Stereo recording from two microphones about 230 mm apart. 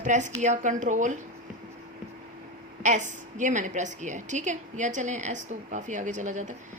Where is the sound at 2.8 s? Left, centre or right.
Right.